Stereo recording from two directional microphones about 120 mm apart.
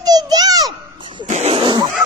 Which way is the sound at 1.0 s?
40° right (ahead or behind).